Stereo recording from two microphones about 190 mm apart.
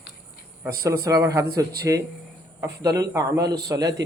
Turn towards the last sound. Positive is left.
turn(degrees=-20)  # may be behind; listen again after turning